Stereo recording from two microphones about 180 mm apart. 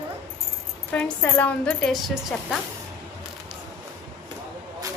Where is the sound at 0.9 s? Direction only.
5° left (ahead or behind).